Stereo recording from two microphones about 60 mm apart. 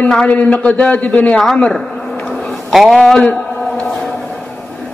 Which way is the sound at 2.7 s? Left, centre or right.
Centre.